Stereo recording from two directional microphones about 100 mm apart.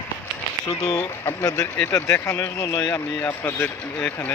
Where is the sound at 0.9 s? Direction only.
20° left (ahead or behind).